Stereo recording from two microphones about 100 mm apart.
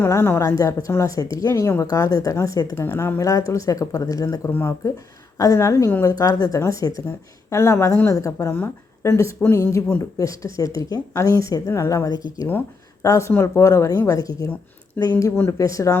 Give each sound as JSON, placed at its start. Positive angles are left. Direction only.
{"t": 0.0, "sound": "speech", "side_deg": 20}
{"t": 2.7, "sound": "speech", "side_deg": 25}
{"t": 4.4, "sound": "a woman's voice", "side_deg": 25}
{"t": 12.5, "sound": "a sound", "side_deg": 20}
{"t": 13.1, "sound": "a woman's voice", "side_deg": 30}
{"t": 15.0, "sound": "speech", "side_deg": 15}
{"t": 15.4, "sound": "speech", "side_deg": 35}